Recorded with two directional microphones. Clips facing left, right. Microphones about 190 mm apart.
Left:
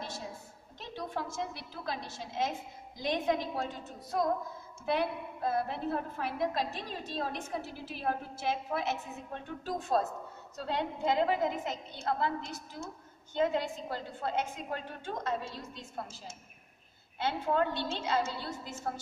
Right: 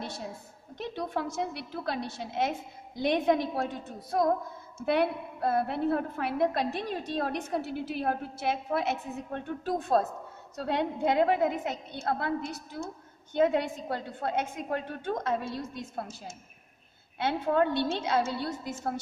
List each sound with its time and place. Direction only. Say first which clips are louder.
0.7 s a woman's voice: right 5 dB; 60° right (ahead or behind)